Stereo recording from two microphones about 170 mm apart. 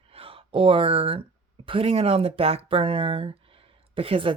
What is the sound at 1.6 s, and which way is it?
Speech, 35° right (ahead or behind).